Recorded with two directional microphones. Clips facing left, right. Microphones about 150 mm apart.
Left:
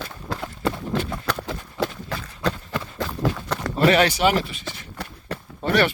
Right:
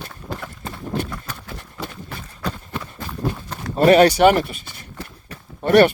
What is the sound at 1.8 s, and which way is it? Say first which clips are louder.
Run: left 6 dB; 90° left.